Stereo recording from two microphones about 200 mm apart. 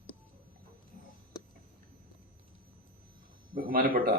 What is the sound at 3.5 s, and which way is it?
Speech, 45° right (ahead or behind).